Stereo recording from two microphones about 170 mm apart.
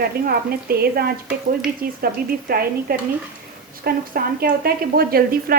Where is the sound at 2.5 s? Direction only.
65° right (ahead or behind).